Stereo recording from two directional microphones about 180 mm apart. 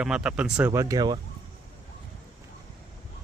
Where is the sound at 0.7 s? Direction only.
20° right (ahead or behind).